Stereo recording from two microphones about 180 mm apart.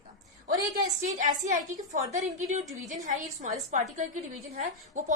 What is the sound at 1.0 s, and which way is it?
A woman's voice, 45° right (ahead or behind).